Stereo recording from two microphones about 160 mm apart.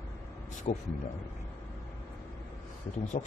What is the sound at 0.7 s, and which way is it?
Speech, 40° left (ahead or behind).